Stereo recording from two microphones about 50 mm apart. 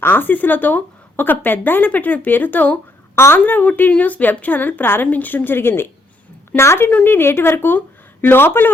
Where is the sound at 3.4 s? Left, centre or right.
Left.